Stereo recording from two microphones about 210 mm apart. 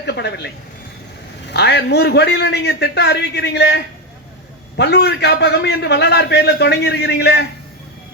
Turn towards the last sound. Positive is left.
turn(degrees=50)  # may be behind; listen again after turning